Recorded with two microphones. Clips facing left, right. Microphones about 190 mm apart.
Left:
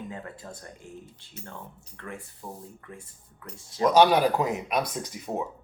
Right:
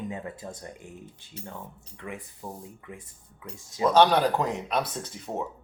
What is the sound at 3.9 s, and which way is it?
Speech, 10° left (ahead or behind).